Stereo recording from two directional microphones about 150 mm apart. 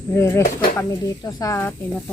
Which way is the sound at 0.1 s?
20° left (ahead or behind).